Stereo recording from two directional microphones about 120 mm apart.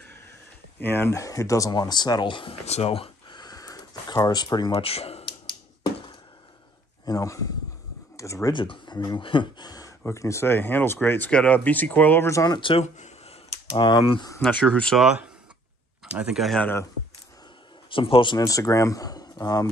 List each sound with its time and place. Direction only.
0.7 s speech: 20° left (ahead or behind); by 2.5 s 40° left (ahead or behind)
2.6 s speech: 60° left (ahead or behind)
3.3 s a sound: 35° left (ahead or behind)
4.7 s speech: 55° left (ahead or behind)
7.1 s speech: 30° left (ahead or behind)
8.5 s speech: 45° left (ahead or behind); by 12.5 s 25° left (ahead or behind)
12.5 s speech: 45° left (ahead or behind)
12.8 s a sound: 75° left (ahead or behind)
13.7 s speech: 40° left (ahead or behind)
14.4 s speech: 10° left (ahead or behind)
15.0 s speech: 5° right (ahead or behind)
17.8 s speech: 45° left (ahead or behind)
18.4 s speech: 25° left (ahead or behind)